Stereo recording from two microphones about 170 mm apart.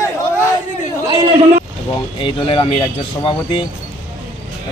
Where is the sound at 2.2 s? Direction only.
30° left (ahead or behind).